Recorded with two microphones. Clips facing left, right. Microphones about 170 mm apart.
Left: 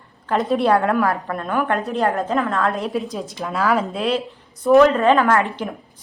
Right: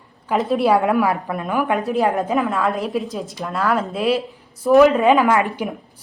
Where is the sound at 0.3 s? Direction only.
Centre (ahead or behind).